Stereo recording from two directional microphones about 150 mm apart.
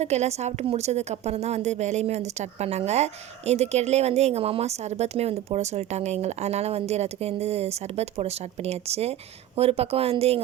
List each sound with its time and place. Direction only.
0.0 s a woman's voice: 45° right (ahead or behind)